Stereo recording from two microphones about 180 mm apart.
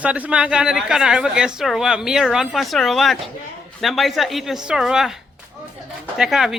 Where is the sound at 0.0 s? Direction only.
5° right (ahead or behind).